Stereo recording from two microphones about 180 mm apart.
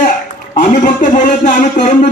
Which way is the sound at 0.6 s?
45° left (ahead or behind).